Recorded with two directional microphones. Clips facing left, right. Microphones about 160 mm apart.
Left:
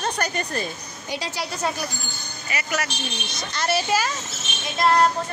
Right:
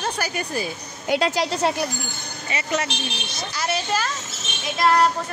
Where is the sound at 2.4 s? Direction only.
25° right (ahead or behind).